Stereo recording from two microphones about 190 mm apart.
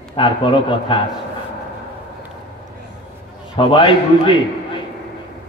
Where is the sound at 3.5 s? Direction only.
25° left (ahead or behind).